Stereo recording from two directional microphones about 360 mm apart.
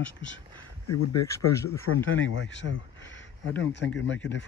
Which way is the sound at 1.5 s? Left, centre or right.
Centre.